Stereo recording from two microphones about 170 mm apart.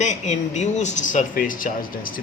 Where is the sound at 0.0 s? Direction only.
45° left (ahead or behind).